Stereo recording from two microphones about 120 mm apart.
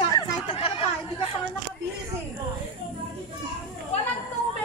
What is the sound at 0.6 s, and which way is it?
Chatter, 50° left (ahead or behind).